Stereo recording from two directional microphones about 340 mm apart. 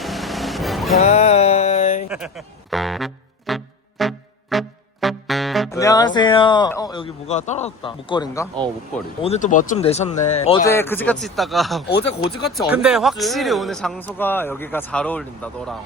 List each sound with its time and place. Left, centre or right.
0.0 s vehicle: centre
0.9 s a sound: centre
2.0 s music: centre
9.2 s speech: centre